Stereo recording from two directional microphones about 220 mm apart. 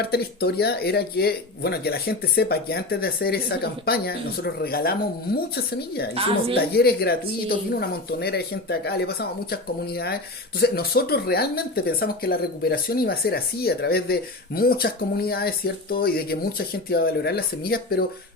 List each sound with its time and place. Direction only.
0.0 s speech: 45° left (ahead or behind)